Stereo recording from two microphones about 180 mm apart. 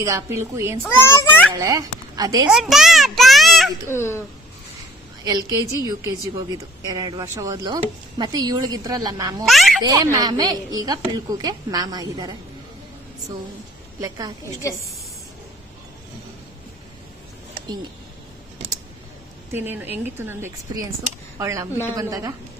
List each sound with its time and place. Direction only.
0.0 s speech: 15° right (ahead or behind)
0.8 s a child's voice: 10° left (ahead or behind)
1.5 s a woman's voice: 20° right (ahead or behind)
2.5 s a child's voice: centre (ahead or behind)
3.8 s a child's voice: 15° left (ahead or behind)
5.2 s a woman's voice: 20° right (ahead or behind)
9.5 s speech: centre (ahead or behind)
9.8 s a woman's voice: 20° right (ahead or behind)
14.0 s a woman's voice: 20° right (ahead or behind)
19.5 s a woman's voice: 10° right (ahead or behind)